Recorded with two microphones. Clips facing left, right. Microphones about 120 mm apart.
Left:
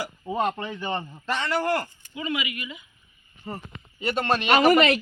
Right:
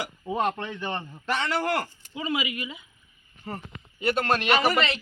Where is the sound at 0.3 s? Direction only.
5° left (ahead or behind).